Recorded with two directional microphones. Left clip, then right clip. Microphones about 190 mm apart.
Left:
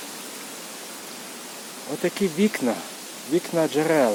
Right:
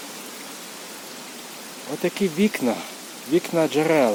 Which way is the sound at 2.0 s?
10° right (ahead or behind).